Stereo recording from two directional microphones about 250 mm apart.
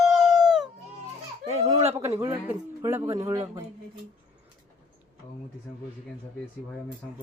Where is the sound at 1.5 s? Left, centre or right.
Right.